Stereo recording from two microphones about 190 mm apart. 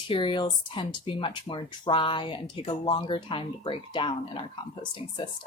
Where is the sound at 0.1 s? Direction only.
25° left (ahead or behind).